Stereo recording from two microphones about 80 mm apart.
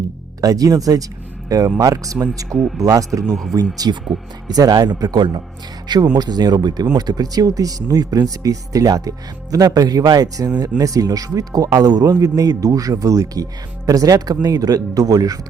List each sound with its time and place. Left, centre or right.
0.4 s speech: right
3.2 s speech: centre
3.8 s speech: right